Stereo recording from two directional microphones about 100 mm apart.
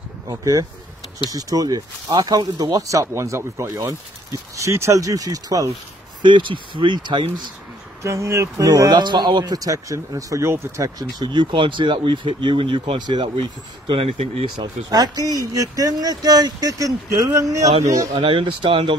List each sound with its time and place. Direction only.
0.3 s speech: 35° right (ahead or behind)
6.2 s speech: 55° right (ahead or behind)
8.0 s speech: 30° right (ahead or behind)
8.6 s speech: 40° right (ahead or behind)
11.0 s speech: 45° right (ahead or behind)
14.0 s speech: 90° right
14.6 s speech: 40° right (ahead or behind)
18.1 s speech: 60° right (ahead or behind)